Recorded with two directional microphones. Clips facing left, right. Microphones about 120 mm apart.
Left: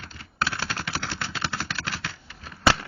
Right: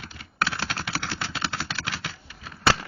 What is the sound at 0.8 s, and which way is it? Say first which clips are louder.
Vehicle: even; 15° right (ahead or behind).